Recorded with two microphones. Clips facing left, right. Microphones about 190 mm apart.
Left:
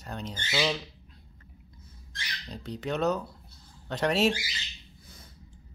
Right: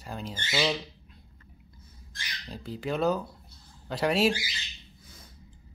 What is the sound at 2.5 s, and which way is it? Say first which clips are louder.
Speech: right 1 dB; 5° right (ahead or behind).